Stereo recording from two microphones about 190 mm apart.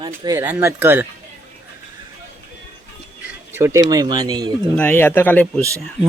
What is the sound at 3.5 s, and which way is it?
Speech, 15° right (ahead or behind).